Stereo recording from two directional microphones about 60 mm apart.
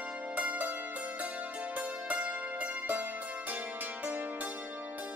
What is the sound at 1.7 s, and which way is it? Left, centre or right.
Music, right.